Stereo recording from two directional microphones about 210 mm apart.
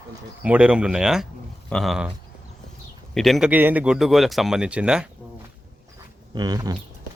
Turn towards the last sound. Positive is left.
turn(degrees=-20)  # may be behind; listen again after turning